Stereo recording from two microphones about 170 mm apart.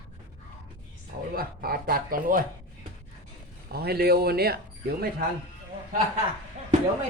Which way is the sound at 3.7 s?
65° right (ahead or behind).